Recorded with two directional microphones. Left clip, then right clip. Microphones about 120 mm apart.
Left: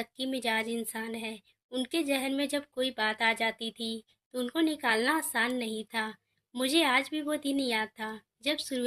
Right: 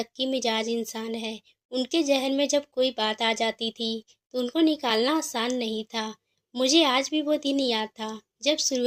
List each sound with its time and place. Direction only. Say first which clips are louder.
0.0 s a woman's voice: right 6 dB; 20° right (ahead or behind)